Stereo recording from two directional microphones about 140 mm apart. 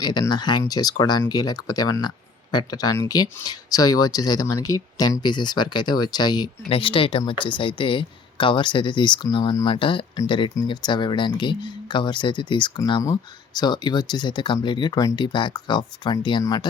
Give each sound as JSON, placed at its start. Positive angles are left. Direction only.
{"t": 0.0, "sound": "speech", "side_deg": 30}